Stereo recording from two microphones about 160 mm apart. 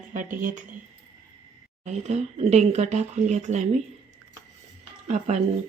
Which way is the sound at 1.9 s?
45° right (ahead or behind).